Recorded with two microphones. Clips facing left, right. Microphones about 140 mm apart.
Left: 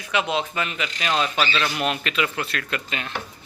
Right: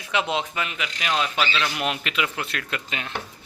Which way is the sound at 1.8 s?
15° right (ahead or behind).